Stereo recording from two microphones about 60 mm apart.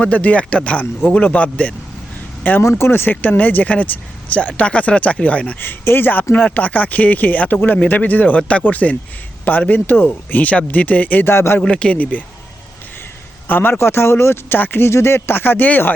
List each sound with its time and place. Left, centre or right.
0.0 s speech: left
2.6 s speech: left
5.5 s speech: left
11.3 s speech: left
11.6 s speech: centre
13.5 s speech: left